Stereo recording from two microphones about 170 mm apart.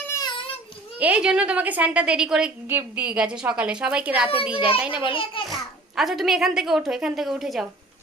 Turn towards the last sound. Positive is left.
turn(degrees=0)  # may be behind; listen again after turning